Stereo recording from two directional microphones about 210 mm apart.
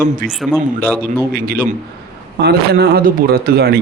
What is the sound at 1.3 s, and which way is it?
Speech, 45° right (ahead or behind).